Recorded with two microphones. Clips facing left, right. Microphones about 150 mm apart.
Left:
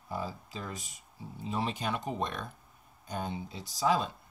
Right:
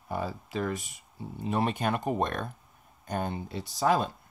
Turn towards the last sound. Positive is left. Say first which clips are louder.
# right 3 dB
turn(degrees=-55)  # may be behind; listen again after turning